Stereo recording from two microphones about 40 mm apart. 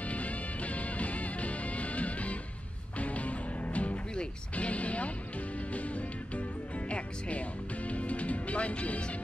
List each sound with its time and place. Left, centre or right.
0.0 s music: left